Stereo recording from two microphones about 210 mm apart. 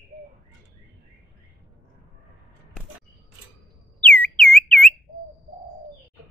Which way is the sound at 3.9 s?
5° left (ahead or behind).